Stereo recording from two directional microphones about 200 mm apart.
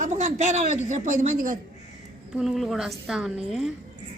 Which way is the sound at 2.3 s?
Centre (ahead or behind).